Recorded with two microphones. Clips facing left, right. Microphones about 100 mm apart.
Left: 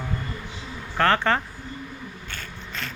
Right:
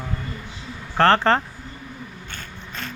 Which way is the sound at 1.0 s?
35° right (ahead or behind).